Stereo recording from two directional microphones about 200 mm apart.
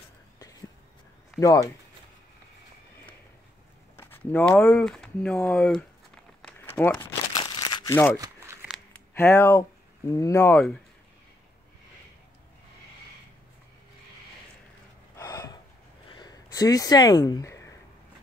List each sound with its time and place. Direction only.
0.4 s whispering: 15° left (ahead or behind)
1.4 s speech: 15° left (ahead or behind)
3.9 s a sound: 10° left (ahead or behind)
8.2 s crumpling: 15° right (ahead or behind)
9.1 s speech: 10° left (ahead or behind)
15.1 s a sound: 15° left (ahead or behind)